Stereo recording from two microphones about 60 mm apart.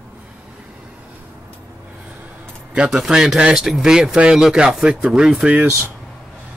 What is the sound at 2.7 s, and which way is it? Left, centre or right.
Speech, centre.